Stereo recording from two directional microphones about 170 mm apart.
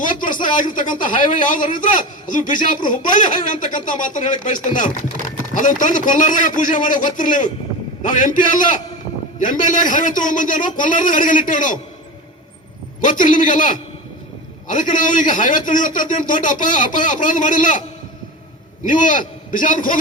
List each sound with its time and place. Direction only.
0.0 s a sound: 50° left (ahead or behind)
0.4 s a man's voice: 50° left (ahead or behind)
13.0 s a man's voice: 50° left (ahead or behind)
18.9 s a man's voice: 50° left (ahead or behind)